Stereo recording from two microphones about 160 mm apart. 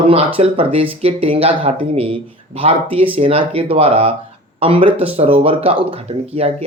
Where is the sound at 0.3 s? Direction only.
35° right (ahead or behind).